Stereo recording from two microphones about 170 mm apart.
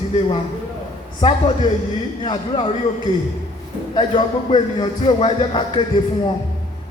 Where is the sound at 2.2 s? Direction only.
25° left (ahead or behind).